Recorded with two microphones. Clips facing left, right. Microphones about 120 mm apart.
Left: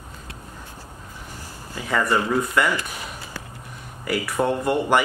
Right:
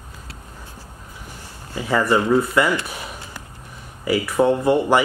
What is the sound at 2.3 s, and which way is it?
Speech, 5° right (ahead or behind).